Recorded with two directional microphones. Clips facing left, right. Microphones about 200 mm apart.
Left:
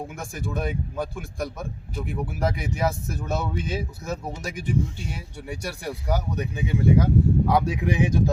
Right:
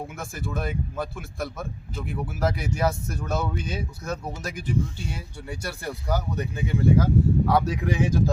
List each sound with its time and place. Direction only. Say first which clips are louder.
0.2 s speech: left 2 dB; centre (ahead or behind)
5.5 s speech: left 1 dB; 10° left (ahead or behind)